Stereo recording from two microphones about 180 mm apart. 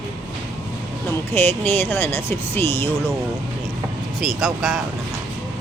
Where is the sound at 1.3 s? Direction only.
10° left (ahead or behind).